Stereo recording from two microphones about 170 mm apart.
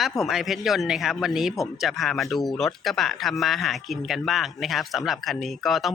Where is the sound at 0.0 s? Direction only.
Centre (ahead or behind).